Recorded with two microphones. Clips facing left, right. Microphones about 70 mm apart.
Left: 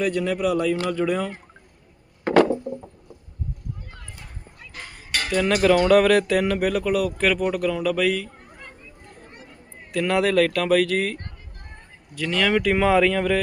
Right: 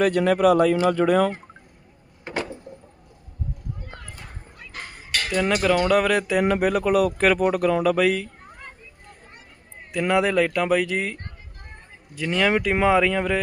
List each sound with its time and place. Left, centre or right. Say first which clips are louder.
0.0 s speech: right 5 dB; right
2.2 s a sound: left 13 dB; left
5.3 s speech: left 1 dB; centre
5.9 s speech: left 3 dB; centre
6.5 s speech: right 2 dB; right
10.0 s speech: left 1 dB; centre
12.1 s speech: even; right